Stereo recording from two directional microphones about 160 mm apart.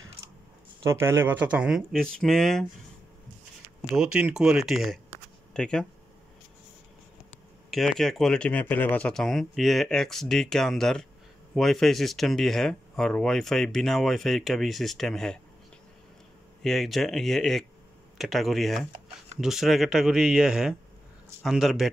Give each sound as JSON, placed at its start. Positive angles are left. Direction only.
{"t": 0.8, "sound": "speech", "side_deg": -15}
{"t": 3.9, "sound": "speech", "side_deg": -5}
{"t": 7.7, "sound": "speech", "side_deg": 0}
{"t": 16.6, "sound": "speech", "side_deg": 0}